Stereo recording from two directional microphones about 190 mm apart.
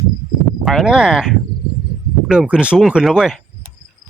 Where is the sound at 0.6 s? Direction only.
Centre (ahead or behind).